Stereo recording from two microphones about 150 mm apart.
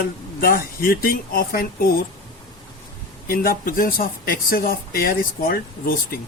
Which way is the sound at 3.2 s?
80° left.